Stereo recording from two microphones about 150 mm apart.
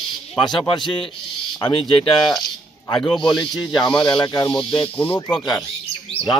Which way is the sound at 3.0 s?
Centre (ahead or behind).